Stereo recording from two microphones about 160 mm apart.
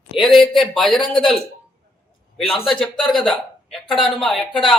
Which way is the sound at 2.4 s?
35° left (ahead or behind).